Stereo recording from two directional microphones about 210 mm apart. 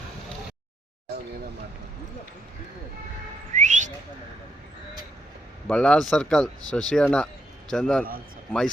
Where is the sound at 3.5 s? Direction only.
35° right (ahead or behind).